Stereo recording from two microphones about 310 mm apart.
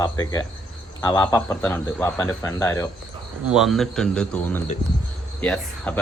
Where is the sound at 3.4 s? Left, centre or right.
Centre.